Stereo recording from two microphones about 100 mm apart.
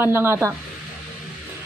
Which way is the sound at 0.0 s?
25° right (ahead or behind).